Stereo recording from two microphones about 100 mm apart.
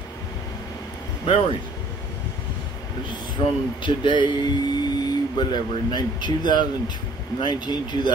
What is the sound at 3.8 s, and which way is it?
Speech, 50° left (ahead or behind).